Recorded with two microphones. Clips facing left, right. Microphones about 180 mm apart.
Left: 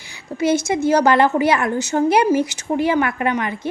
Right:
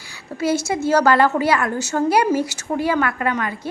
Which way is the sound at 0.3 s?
20° left (ahead or behind).